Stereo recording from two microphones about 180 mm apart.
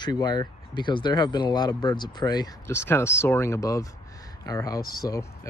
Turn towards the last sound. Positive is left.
turn(degrees=20)  # may be behind; listen again after turning